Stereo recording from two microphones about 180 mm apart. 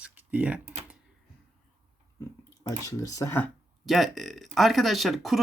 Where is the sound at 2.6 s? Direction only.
20° left (ahead or behind).